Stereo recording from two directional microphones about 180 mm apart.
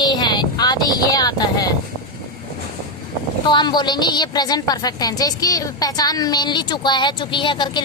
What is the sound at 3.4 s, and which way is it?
A woman's voice, 25° left (ahead or behind).